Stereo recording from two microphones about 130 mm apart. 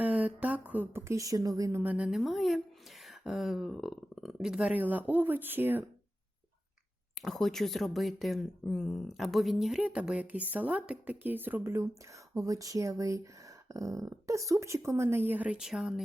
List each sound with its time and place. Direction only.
0.0 s a woman's voice: 10° right (ahead or behind); by 1.8 s 25° right (ahead or behind)
1.8 s speech: 10° right (ahead or behind)
2.0 s speech: centre (ahead or behind)
7.2 s speech: centre (ahead or behind)